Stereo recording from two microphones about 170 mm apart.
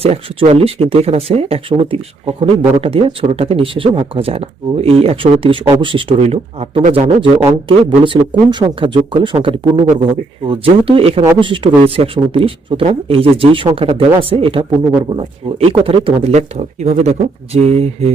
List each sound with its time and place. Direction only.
0.0 s speech: 35° right (ahead or behind)